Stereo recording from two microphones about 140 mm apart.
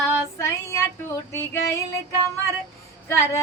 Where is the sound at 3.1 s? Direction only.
20° left (ahead or behind).